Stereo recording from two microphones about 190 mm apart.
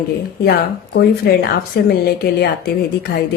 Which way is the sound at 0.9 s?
55° left (ahead or behind).